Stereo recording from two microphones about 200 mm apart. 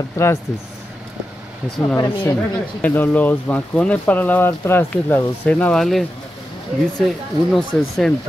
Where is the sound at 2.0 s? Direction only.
15° left (ahead or behind).